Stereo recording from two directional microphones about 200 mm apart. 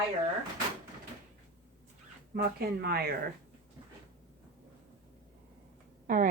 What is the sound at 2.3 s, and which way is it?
Speech, 50° right (ahead or behind).